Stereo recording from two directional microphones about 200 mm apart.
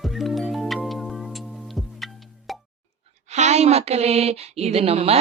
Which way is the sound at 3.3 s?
35° right (ahead or behind).